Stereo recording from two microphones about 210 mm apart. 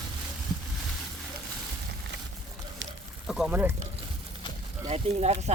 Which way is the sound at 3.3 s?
5° right (ahead or behind).